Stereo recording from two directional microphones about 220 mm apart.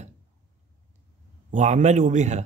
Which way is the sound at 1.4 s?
35° right (ahead or behind).